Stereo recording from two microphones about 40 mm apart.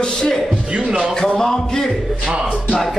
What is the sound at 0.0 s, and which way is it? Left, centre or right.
Speech, centre.